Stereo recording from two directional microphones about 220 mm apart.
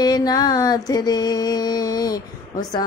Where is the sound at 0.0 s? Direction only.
15° left (ahead or behind).